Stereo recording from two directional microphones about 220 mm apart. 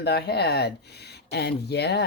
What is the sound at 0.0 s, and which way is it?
Speech, 50° left (ahead or behind).